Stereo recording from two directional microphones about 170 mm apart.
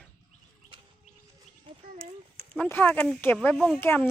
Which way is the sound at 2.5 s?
10° left (ahead or behind).